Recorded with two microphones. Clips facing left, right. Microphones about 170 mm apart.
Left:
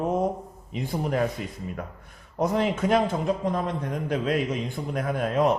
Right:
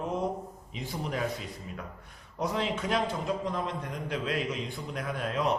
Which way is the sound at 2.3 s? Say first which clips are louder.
Left 7 dB; 50° left (ahead or behind).